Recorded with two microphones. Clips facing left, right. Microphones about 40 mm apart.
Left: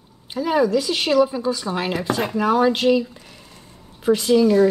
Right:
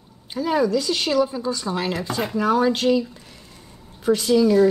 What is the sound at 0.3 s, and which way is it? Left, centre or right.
Speech, centre.